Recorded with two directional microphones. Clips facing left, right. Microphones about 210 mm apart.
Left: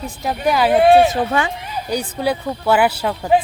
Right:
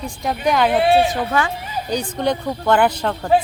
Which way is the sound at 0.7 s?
50° left (ahead or behind).